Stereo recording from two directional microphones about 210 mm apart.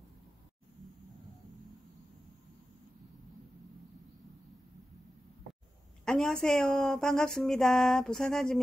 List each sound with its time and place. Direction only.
6.0 s speech: centre (ahead or behind)